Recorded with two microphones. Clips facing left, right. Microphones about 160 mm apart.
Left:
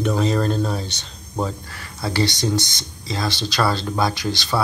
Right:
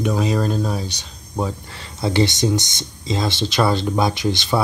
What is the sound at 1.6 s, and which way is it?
Speech, 25° right (ahead or behind).